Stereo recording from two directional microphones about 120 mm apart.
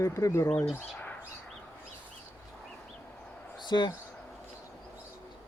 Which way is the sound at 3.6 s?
40° left (ahead or behind).